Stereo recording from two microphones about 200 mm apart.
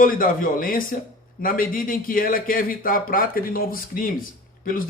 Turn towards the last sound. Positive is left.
turn(degrees=45)  # may be behind; listen again after turning